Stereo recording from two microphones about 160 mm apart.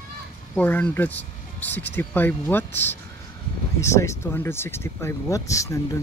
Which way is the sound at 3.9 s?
15° left (ahead or behind).